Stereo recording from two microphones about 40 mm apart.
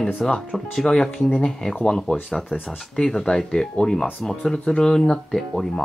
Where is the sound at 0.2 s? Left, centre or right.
Centre.